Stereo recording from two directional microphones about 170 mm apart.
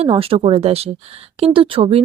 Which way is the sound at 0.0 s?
35° right (ahead or behind).